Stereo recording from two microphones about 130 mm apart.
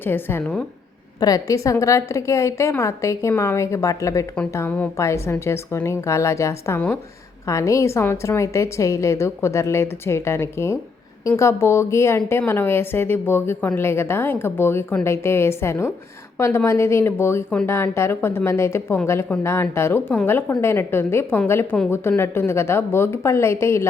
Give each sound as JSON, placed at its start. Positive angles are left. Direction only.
{"t": 0.0, "sound": "a woman's voice", "side_deg": 15}
{"t": 1.2, "sound": "a woman's voice", "side_deg": 25}